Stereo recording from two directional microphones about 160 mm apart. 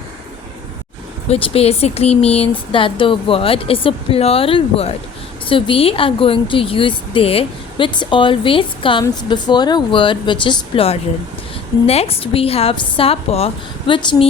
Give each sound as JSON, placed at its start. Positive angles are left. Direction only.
{"t": 1.3, "sound": "a woman's voice", "side_deg": 35}